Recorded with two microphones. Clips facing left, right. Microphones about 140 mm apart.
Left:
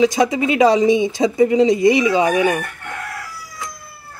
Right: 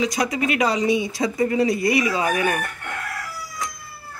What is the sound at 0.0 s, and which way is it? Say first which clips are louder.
Speech: left 7 dB; 25° left (ahead or behind).